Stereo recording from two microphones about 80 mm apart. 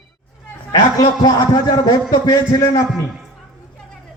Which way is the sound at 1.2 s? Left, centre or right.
Left.